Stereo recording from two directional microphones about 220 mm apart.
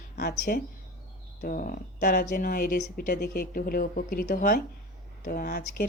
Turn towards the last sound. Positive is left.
turn(degrees=40)  # may be behind; listen again after turning